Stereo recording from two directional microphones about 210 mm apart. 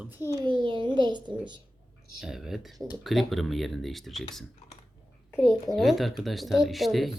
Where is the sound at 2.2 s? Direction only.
Centre (ahead or behind).